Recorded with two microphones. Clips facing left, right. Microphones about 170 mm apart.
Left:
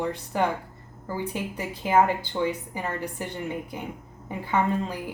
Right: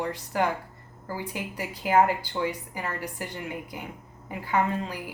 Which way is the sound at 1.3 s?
25° left (ahead or behind).